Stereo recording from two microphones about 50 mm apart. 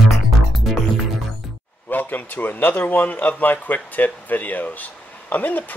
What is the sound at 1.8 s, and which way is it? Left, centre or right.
A man's voice, left.